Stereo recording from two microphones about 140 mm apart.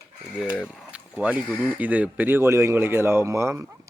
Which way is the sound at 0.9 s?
10° right (ahead or behind).